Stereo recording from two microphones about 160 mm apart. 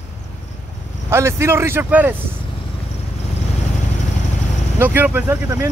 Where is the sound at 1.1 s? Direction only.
15° right (ahead or behind).